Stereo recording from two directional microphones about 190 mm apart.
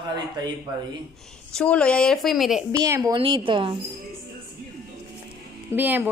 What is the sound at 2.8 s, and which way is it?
Speech, 20° right (ahead or behind).